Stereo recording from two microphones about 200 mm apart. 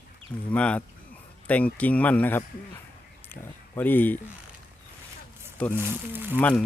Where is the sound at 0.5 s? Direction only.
5° left (ahead or behind).